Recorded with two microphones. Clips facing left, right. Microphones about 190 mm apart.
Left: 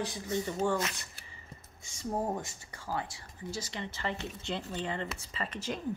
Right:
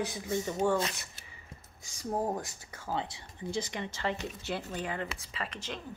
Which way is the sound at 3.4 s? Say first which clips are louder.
Right 4 dB; 15° right (ahead or behind).